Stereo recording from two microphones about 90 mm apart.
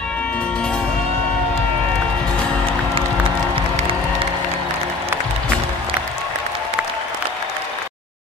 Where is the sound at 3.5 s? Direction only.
90° right.